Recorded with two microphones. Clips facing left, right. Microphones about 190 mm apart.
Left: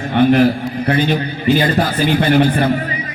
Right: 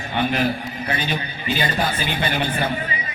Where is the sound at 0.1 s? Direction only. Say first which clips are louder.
Left 11 dB; 60° left (ahead or behind).